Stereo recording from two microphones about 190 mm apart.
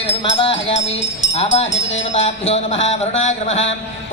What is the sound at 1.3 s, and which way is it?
Speech, 30° left (ahead or behind).